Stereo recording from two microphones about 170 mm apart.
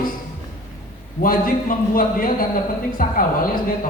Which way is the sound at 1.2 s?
55° left (ahead or behind).